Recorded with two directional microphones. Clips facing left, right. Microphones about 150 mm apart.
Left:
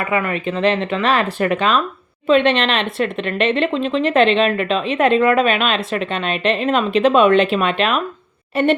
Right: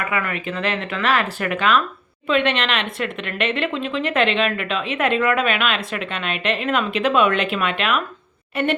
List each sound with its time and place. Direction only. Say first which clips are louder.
0.0 s speech: left 5 dB; 25° left (ahead or behind)